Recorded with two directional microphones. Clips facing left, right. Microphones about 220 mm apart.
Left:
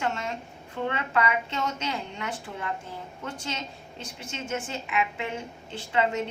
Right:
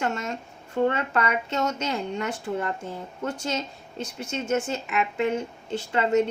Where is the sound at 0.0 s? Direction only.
45° right (ahead or behind).